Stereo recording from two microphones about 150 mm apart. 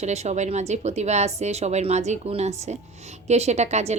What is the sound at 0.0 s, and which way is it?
Speech, 50° right (ahead or behind).